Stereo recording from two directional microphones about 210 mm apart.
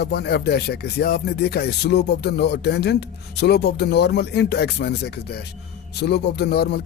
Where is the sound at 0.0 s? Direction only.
50° left (ahead or behind).